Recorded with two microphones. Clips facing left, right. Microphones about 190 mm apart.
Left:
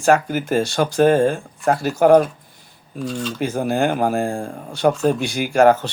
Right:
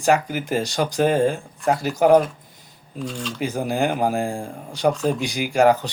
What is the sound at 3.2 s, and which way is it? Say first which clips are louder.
Speech: left 3 dB; 5° left (ahead or behind).